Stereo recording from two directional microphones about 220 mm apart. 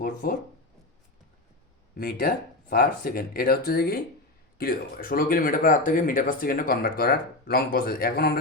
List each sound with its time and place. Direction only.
0.0 s speech: 40° left (ahead or behind)
2.0 s speech: 40° left (ahead or behind)